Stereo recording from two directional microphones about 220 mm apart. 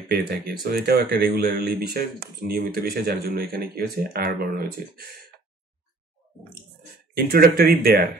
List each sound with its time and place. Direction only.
0.1 s speech: 45° right (ahead or behind)
7.2 s speech: 45° right (ahead or behind)